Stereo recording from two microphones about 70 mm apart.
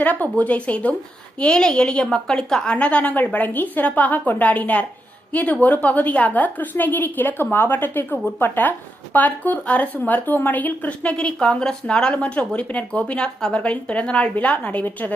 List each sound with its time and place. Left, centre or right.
0.0 s a woman's voice: left
2.7 s a woman's voice: centre